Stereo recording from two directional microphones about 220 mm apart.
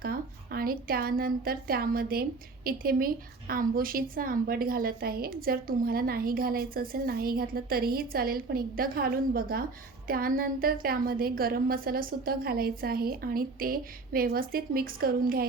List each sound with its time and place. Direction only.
0.0 s a woman's voice: 40° right (ahead or behind)